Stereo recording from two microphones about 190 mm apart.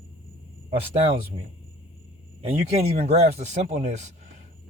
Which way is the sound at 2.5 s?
40° right (ahead or behind).